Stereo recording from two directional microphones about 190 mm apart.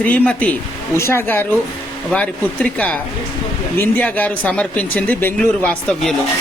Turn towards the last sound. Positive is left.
turn(degrees=5)  # may be behind; listen again after turning